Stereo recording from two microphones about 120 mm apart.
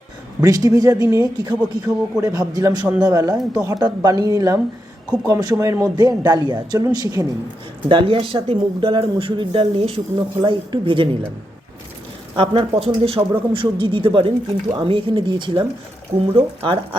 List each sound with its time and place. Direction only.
0.4 s a man's voice: 30° right (ahead or behind)
7.9 s speech: 45° right (ahead or behind)
12.4 s speech: 50° right (ahead or behind)